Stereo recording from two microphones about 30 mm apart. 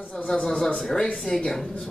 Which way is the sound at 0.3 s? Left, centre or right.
Centre.